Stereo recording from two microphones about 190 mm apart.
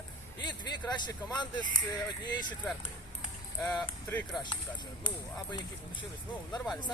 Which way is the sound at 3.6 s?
5° left (ahead or behind).